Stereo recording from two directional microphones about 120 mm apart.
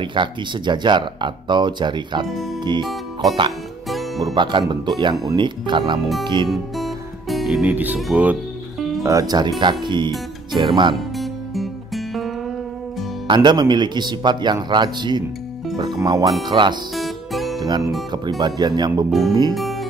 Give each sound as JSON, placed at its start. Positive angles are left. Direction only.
{"t": 0.0, "sound": "speech", "side_deg": -40}
{"t": 2.8, "sound": "speech", "side_deg": 0}
{"t": 4.2, "sound": "speech", "side_deg": -35}
{"t": 6.5, "sound": "music", "side_deg": 0}
{"t": 9.0, "sound": "speech", "side_deg": -30}
{"t": 11.1, "sound": "music", "side_deg": 0}
{"t": 13.3, "sound": "speech", "side_deg": -40}
{"t": 16.9, "sound": "music", "side_deg": 0}
{"t": 17.6, "sound": "speech", "side_deg": -35}
{"t": 19.0, "sound": "speech", "side_deg": 0}
{"t": 19.5, "sound": "music", "side_deg": 0}